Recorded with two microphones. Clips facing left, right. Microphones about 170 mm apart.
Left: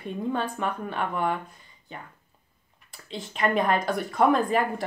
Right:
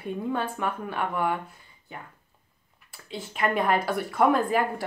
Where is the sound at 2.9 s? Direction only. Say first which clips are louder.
Even; 5° right (ahead or behind).